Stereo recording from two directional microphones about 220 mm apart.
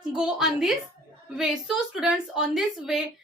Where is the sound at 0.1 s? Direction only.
5° right (ahead or behind).